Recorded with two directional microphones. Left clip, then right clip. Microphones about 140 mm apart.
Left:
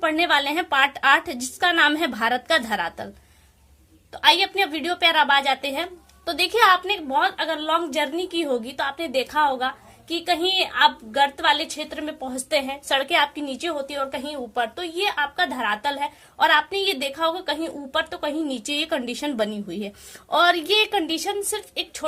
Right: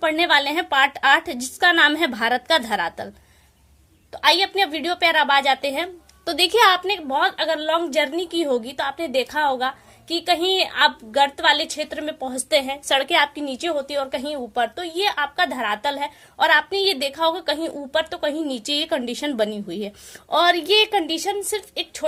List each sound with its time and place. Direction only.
0.0 s a woman's voice: 20° right (ahead or behind)
4.1 s a woman's voice: 25° right (ahead or behind)